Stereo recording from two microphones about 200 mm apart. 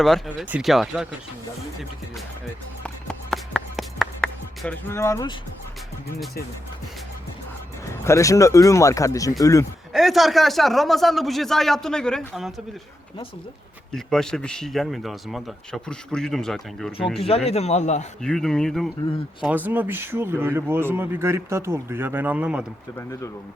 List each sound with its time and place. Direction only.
0.0 s speech: centre (ahead or behind)
2.8 s music: 5° left (ahead or behind)
8.0 s speech: 15° left (ahead or behind)
9.9 s speech: centre (ahead or behind)
13.9 s speech: centre (ahead or behind)
17.2 s a man's voice: 30° left (ahead or behind)
18.2 s speech: 5° left (ahead or behind)